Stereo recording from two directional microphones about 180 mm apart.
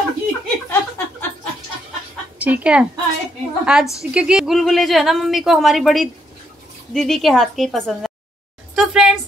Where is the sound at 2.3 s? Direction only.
5° right (ahead or behind).